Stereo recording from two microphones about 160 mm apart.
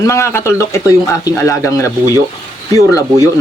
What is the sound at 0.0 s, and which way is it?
Speech, 20° left (ahead or behind).